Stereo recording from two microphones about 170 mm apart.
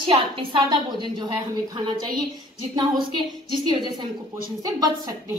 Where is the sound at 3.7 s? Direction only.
25° right (ahead or behind).